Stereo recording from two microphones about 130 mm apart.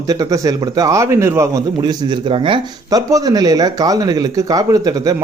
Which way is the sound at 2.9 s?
25° right (ahead or behind).